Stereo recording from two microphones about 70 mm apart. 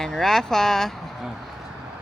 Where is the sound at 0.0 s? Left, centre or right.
Centre.